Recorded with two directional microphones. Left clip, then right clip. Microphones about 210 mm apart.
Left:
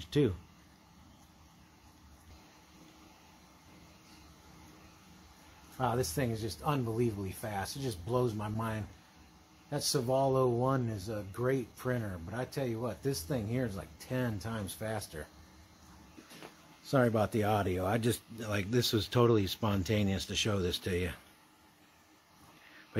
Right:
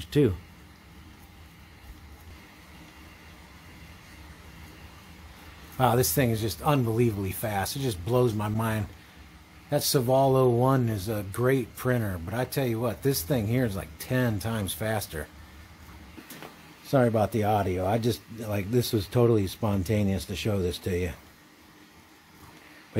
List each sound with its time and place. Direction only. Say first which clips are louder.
0.0 s speech: right 6 dB; 5° right (ahead or behind)
5.8 s speech: right 9 dB; 25° right (ahead or behind)
16.8 s speech: right 6 dB; 5° left (ahead or behind)